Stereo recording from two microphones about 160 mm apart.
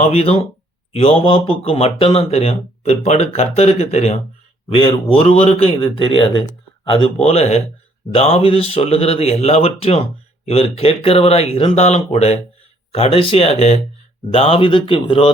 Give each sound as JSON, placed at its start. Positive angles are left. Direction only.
{"t": 0.0, "sound": "speech", "side_deg": 40}